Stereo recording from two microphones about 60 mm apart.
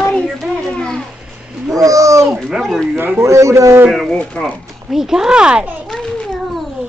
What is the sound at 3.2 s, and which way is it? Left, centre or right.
Speech, right.